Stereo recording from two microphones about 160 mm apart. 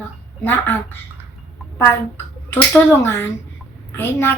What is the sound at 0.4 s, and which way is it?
Speech, 15° left (ahead or behind).